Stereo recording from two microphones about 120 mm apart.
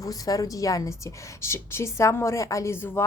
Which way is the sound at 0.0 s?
30° left (ahead or behind).